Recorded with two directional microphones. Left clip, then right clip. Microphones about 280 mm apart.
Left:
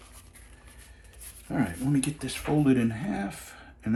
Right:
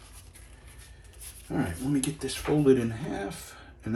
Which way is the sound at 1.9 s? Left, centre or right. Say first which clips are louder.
Even; centre.